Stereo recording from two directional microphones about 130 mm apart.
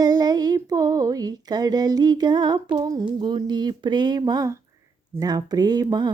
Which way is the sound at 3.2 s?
40° right (ahead or behind).